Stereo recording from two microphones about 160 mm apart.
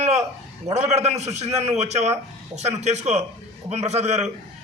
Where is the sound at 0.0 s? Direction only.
45° right (ahead or behind).